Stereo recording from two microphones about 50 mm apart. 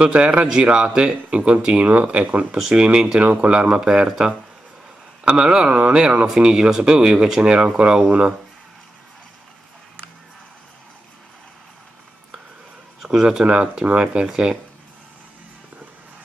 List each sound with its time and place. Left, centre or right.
0.0 s speech: right
1.9 s speech: right
2.5 s speech: centre
13.0 s speech: centre